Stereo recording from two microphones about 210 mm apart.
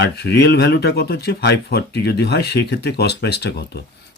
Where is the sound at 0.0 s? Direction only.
50° left (ahead or behind).